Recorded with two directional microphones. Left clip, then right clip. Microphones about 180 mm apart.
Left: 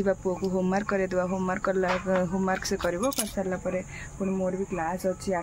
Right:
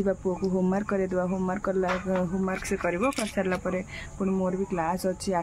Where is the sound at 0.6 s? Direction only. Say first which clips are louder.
Left 1 dB; 20° right (ahead or behind).